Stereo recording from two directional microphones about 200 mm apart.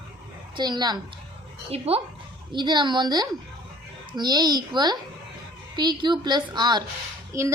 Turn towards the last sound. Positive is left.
turn(degrees=-15)  # may be behind; listen again after turning